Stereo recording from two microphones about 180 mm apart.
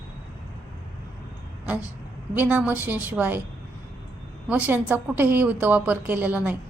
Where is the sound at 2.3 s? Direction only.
10° right (ahead or behind).